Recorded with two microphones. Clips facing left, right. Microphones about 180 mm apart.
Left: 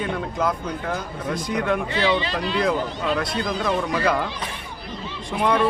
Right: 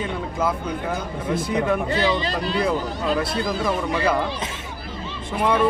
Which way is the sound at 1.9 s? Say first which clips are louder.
Even; 40° right (ahead or behind).